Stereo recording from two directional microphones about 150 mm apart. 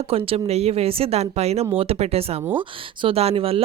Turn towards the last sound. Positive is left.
turn(degrees=-40)  # may be behind; listen again after turning